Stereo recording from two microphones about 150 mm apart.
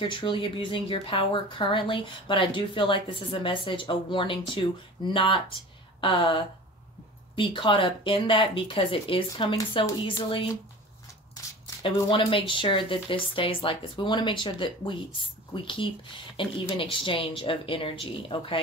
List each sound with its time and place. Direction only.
0.1 s speech: 35° left (ahead or behind)
11.6 s speech: 35° left (ahead or behind)